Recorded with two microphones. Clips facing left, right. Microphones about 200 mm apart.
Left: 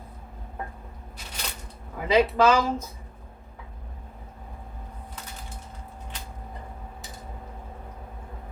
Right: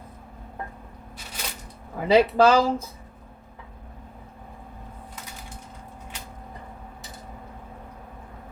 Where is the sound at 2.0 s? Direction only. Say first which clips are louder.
Right 3 dB; 35° right (ahead or behind).